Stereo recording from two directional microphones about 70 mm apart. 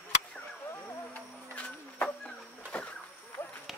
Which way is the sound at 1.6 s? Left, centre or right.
Centre.